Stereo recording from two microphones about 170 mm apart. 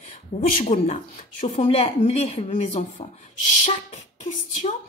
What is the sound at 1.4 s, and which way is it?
A woman's voice, 40° left (ahead or behind).